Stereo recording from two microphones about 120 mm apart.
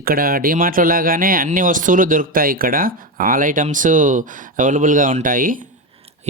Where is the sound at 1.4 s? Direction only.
90° right.